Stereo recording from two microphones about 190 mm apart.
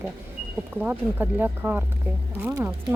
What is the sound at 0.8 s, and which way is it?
Speech, 10° right (ahead or behind).